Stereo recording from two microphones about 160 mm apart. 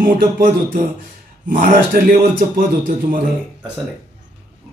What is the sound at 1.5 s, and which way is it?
Speech, 60° right (ahead or behind).